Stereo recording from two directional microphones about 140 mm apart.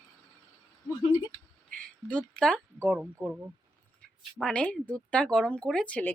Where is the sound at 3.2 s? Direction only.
20° right (ahead or behind).